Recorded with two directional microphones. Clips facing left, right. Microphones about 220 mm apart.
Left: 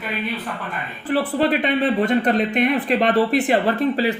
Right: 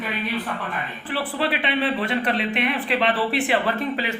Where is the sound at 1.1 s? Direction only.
40° left (ahead or behind).